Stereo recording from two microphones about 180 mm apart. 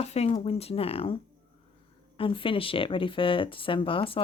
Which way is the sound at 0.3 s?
35° left (ahead or behind).